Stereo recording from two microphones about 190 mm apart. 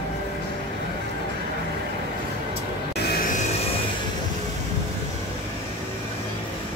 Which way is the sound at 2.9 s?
50° left (ahead or behind).